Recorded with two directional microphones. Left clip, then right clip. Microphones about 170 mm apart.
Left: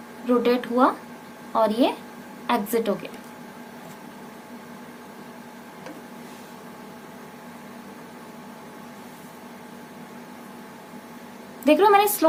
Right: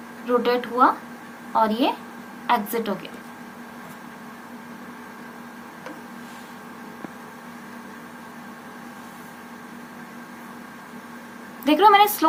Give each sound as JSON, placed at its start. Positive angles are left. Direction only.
{"t": 0.3, "sound": "a woman's voice", "side_deg": 70}
{"t": 11.6, "sound": "a woman's voice", "side_deg": 60}